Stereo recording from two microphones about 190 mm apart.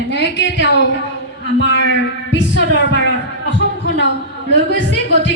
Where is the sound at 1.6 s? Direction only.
70° left (ahead or behind).